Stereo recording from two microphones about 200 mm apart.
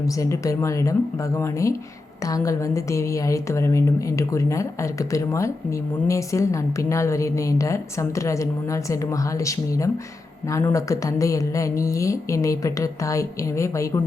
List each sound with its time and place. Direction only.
0.0 s a woman's voice: 15° left (ahead or behind)